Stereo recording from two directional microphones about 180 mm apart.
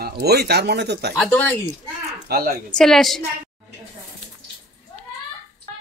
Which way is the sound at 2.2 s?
55° right (ahead or behind).